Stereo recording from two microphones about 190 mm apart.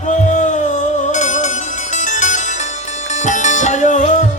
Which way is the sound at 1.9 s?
40° left (ahead or behind).